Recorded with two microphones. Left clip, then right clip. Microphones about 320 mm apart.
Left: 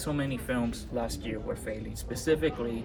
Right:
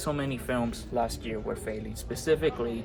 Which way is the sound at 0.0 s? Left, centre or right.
Centre.